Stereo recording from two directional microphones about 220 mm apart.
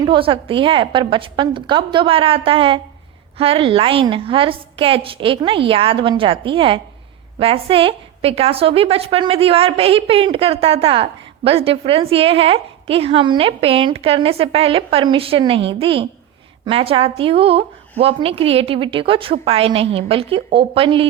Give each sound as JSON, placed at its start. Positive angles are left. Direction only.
{"t": 0.0, "sound": "a woman's voice", "side_deg": -20}